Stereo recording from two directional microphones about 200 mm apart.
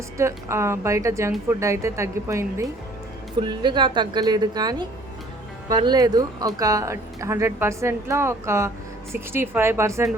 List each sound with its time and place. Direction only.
0.2 s a woman's voice: 15° right (ahead or behind)